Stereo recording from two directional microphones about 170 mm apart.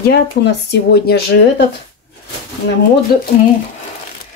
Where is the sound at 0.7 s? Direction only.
80° left.